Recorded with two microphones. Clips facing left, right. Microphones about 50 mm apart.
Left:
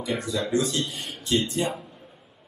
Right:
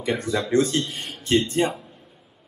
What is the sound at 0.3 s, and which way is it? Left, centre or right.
A man's voice, right.